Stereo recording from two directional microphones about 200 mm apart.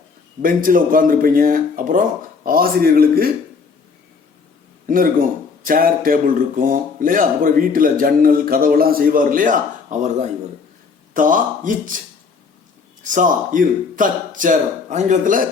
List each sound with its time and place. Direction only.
0.4 s speech: 45° right (ahead or behind)
4.9 s speech: 45° right (ahead or behind)
11.1 s speech: 40° right (ahead or behind)